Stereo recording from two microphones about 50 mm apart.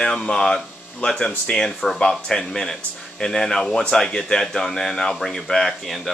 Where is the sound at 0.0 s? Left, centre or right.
Centre.